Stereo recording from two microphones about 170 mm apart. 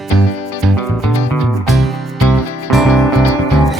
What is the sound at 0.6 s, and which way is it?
Music, centre (ahead or behind).